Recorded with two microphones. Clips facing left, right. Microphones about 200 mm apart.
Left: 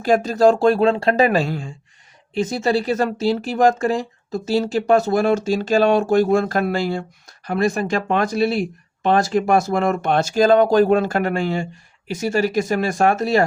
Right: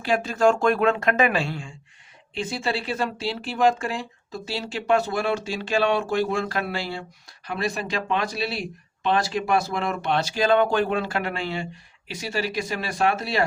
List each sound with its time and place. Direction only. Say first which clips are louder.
0.0 s speech: left 6 dB; 40° left (ahead or behind)